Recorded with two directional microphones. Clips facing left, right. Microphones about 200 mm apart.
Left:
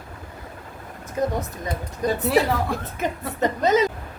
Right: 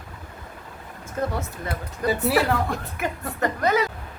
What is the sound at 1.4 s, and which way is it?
Speech, 15° left (ahead or behind).